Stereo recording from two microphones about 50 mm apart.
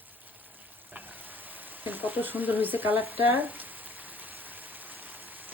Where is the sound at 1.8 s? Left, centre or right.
Right.